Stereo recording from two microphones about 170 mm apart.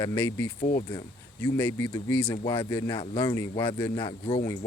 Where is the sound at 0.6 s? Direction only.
45° left (ahead or behind).